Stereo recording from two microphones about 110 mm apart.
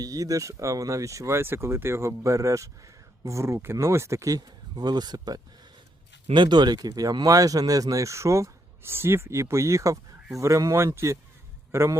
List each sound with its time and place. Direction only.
0.0 s a man's voice: 30° right (ahead or behind)